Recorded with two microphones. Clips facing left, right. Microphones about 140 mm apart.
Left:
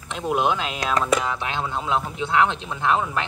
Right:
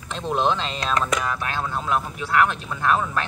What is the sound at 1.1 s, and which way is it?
Speech, 20° left (ahead or behind).